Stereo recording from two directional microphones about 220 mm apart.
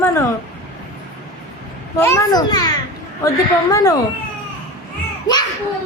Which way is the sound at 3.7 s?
15° left (ahead or behind).